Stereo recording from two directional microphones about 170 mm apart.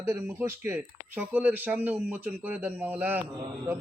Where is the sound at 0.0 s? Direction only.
10° right (ahead or behind).